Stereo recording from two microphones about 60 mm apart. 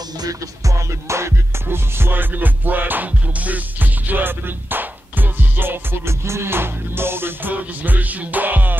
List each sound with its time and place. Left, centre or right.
0.2 s music: right
7.5 s music: right